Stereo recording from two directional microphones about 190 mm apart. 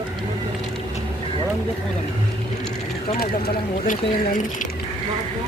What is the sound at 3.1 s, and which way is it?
Speech, 45° left (ahead or behind).